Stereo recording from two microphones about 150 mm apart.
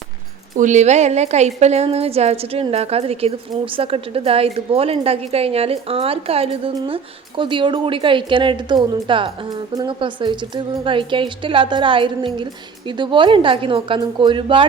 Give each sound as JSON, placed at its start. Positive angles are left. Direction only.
{"t": 0.5, "sound": "a woman's voice", "side_deg": -55}